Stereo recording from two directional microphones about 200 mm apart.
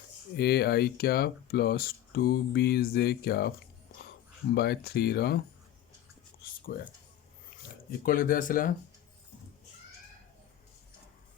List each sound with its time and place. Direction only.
0.3 s speech: 55° left (ahead or behind)
4.5 s speech: 50° left (ahead or behind)
6.7 s speech: 45° left (ahead or behind)
8.0 s speech: 45° left (ahead or behind)